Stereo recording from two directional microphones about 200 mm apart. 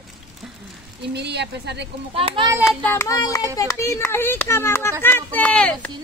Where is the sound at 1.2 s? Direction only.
60° right (ahead or behind).